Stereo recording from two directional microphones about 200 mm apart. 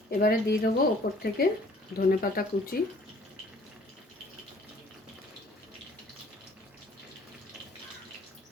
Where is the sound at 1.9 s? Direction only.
45° left (ahead or behind).